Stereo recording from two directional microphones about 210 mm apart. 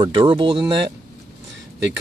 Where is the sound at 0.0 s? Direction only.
25° right (ahead or behind).